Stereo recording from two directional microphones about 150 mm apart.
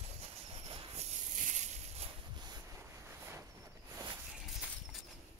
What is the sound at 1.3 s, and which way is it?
Snake, 55° right (ahead or behind).